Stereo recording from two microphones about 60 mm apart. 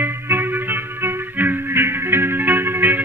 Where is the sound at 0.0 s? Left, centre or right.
Right.